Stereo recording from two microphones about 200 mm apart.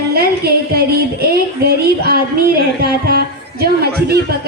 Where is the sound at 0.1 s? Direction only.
50° right (ahead or behind).